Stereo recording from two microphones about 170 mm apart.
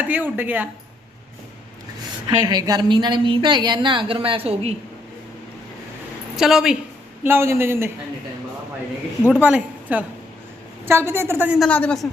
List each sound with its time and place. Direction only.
0.1 s speech: 10° right (ahead or behind)
2.2 s a woman's voice: 25° right (ahead or behind)
6.3 s a woman's voice: centre (ahead or behind)
7.3 s speech: 15° right (ahead or behind)
9.2 s speech: 5° right (ahead or behind)
11.7 s a man's voice: 5° left (ahead or behind)